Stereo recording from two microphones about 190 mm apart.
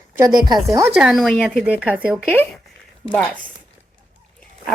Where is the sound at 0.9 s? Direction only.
Centre (ahead or behind).